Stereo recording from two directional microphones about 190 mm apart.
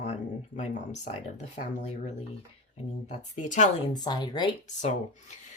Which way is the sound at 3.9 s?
20° left (ahead or behind).